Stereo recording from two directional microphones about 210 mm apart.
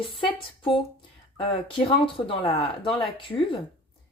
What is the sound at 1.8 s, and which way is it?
Speech, 25° left (ahead or behind).